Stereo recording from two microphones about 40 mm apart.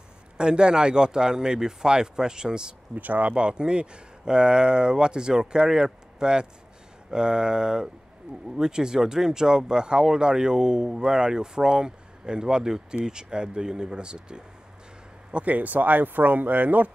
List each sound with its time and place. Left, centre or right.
0.4 s speech: right
3.0 s speech: right
3.3 s speech: right
15.3 s speech: right